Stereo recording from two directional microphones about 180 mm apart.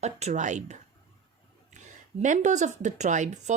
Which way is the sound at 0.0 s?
40° right (ahead or behind).